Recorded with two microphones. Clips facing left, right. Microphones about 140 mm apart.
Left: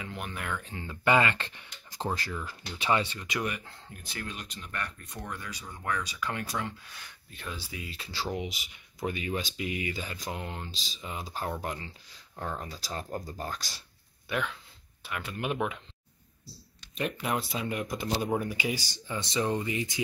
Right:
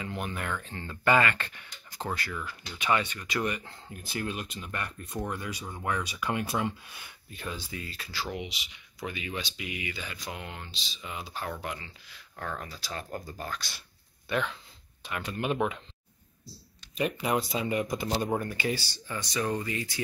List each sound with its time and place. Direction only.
0.0 s speech: centre (ahead or behind)
1.0 s speech: 20° left (ahead or behind)
3.4 s speech: centre (ahead or behind)
7.9 s speech: 25° left (ahead or behind)
8.5 s speech: 45° left (ahead or behind)
12.4 s speech: 20° left (ahead or behind)
14.3 s speech: 5° left (ahead or behind)
16.9 s speech: centre (ahead or behind); by 20.0 s 20° left (ahead or behind)